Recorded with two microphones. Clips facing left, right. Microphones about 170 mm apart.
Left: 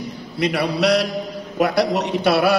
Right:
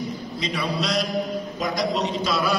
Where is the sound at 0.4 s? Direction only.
70° left (ahead or behind).